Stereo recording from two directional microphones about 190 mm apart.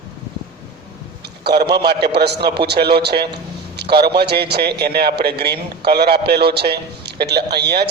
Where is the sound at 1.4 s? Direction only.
60° right (ahead or behind).